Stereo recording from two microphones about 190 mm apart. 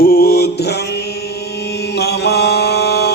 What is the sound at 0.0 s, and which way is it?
Mantra, 55° left (ahead or behind).